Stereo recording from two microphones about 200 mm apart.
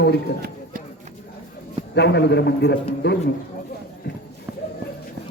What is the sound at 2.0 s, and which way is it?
A man's voice, 60° left (ahead or behind).